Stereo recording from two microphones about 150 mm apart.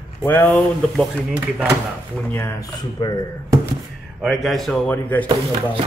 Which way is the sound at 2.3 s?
15° left (ahead or behind).